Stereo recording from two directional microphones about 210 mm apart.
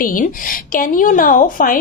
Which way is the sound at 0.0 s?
40° left (ahead or behind).